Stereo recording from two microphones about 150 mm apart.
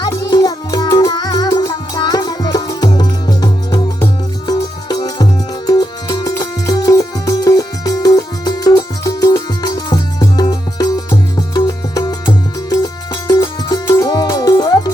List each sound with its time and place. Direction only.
0.0 s music: 25° left (ahead or behind)
4.9 s music: 25° left (ahead or behind)